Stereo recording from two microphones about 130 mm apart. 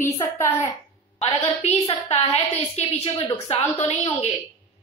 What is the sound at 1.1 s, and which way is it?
A woman's voice, 55° left (ahead or behind).